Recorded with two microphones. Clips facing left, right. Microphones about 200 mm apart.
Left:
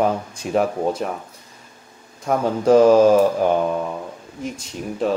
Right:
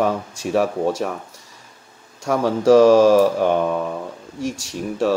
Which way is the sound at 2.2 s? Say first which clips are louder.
Right 1 dB; 90° right.